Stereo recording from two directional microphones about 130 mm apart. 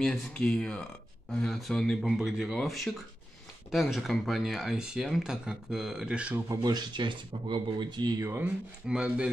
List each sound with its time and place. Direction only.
0.0 s speech: 5° left (ahead or behind)
6.5 s speech: 30° right (ahead or behind)
8.2 s speech: 15° right (ahead or behind)